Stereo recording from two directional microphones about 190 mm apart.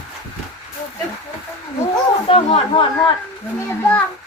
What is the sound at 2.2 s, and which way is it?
Speech, 30° left (ahead or behind).